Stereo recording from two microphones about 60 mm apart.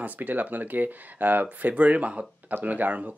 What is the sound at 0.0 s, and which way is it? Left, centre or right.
Speech, right.